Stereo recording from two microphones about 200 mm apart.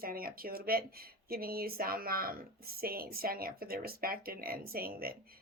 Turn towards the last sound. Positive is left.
turn(degrees=-50)  # may be behind; listen again after turning